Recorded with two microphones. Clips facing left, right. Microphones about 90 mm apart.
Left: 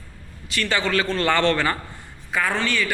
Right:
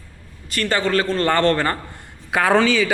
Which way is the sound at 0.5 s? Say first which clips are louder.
Right 3 dB; 40° right (ahead or behind).